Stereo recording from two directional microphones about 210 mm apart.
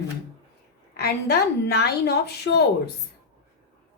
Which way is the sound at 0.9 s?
50° left (ahead or behind).